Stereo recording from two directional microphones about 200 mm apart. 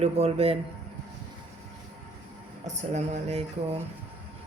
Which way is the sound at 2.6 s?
35° right (ahead or behind).